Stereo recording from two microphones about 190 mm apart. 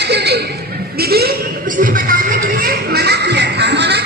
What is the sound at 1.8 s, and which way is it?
Music, 50° right (ahead or behind).